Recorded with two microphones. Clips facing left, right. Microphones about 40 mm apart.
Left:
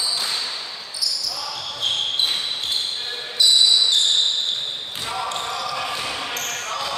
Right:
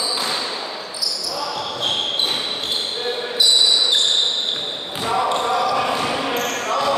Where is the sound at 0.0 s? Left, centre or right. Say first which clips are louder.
Right 3 dB; centre.